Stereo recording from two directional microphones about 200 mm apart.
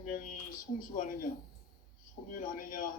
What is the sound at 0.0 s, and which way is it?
Speech, 40° left (ahead or behind).